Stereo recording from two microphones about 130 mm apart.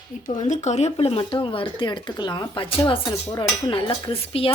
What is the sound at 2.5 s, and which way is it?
Dishes, 40° left (ahead or behind).